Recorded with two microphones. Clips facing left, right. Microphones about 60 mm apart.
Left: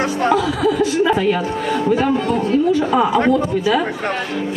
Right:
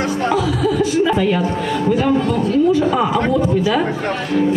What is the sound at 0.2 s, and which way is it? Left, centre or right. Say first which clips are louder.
Speech: left 3 dB; left.